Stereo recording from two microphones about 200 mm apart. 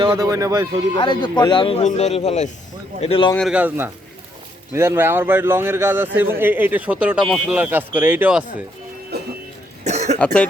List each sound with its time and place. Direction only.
0.0 s speech: 20° right (ahead or behind)
0.9 s speech: 25° left (ahead or behind)
3.3 s speech: 5° right (ahead or behind)
9.8 s cough: 35° right (ahead or behind)
10.2 s cough: 5° left (ahead or behind)